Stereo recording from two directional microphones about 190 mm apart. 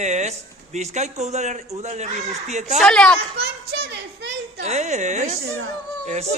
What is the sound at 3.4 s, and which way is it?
Speech, 60° right (ahead or behind).